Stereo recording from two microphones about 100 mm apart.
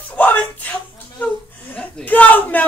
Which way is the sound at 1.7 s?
15° left (ahead or behind).